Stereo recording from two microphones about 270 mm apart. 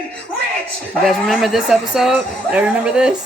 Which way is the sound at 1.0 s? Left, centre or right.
Centre.